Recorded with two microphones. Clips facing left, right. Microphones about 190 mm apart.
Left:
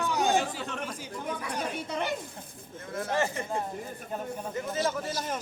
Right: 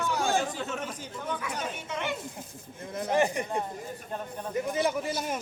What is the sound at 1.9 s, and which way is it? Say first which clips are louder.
Speech: left 1 dB; 35° left (ahead or behind).